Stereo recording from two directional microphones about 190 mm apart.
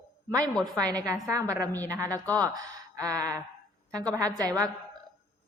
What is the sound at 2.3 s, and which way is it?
Speech, 20° right (ahead or behind).